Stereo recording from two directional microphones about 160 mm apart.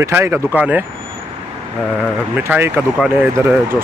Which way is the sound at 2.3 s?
10° right (ahead or behind).